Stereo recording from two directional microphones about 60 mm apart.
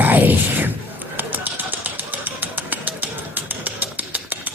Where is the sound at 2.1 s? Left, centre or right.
Right.